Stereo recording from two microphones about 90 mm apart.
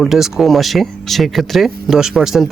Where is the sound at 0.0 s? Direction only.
5° right (ahead or behind).